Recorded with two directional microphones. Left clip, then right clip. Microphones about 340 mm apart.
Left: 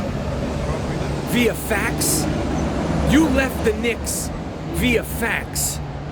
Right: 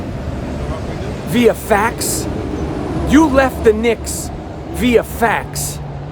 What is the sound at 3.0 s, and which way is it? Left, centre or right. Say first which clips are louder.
Speech: right 7 dB; centre.